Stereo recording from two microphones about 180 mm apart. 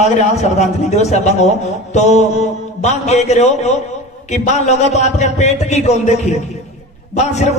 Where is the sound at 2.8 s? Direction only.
40° left (ahead or behind).